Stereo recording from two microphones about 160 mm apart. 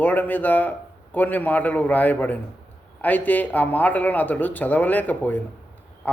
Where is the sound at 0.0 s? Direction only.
10° left (ahead or behind).